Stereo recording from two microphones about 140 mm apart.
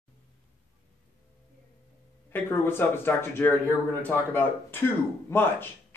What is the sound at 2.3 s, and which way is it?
Speech, 15° left (ahead or behind).